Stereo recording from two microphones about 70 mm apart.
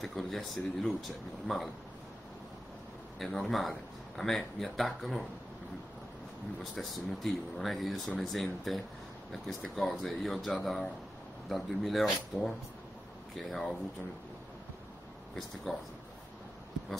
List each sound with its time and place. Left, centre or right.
0.0 s speech: centre
3.2 s speech: centre
6.6 s speech: centre
15.3 s speech: centre